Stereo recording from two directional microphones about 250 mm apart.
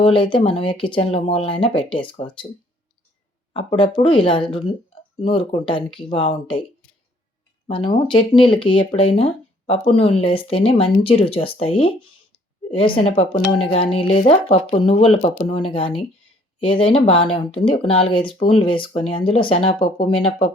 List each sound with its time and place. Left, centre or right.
0.0 s speech: centre
3.5 s speech: centre
7.7 s speech: centre